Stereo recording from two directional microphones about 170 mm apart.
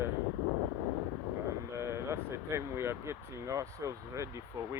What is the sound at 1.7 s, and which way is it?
Speech, 15° right (ahead or behind).